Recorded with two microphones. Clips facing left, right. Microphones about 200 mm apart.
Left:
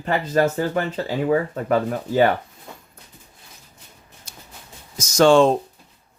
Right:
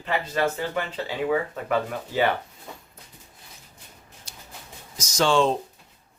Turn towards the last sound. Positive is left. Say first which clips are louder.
# left 7 dB
turn(degrees=50)  # may be behind; listen again after turning